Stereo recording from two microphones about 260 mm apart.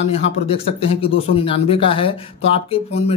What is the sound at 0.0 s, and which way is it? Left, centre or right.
Speech, left.